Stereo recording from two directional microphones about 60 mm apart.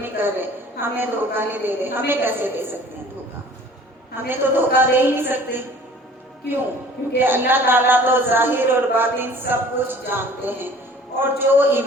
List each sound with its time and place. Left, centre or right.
0.0 s a man's voice: right
4.3 s a man's voice: right
7.3 s a man's voice: right